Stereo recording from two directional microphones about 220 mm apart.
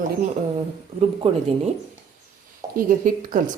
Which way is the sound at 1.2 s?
25° right (ahead or behind).